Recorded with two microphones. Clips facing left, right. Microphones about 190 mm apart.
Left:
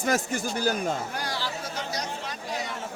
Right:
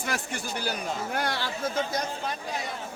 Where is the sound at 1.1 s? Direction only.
60° right (ahead or behind).